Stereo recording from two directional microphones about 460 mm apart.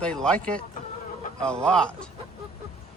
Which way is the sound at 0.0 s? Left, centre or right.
Centre.